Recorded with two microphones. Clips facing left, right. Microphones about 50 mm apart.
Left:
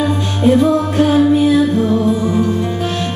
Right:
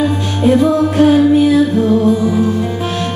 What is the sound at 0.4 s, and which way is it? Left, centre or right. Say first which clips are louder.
Music: right 1 dB; centre.